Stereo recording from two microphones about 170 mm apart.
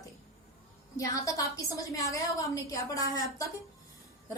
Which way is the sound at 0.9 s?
20° left (ahead or behind).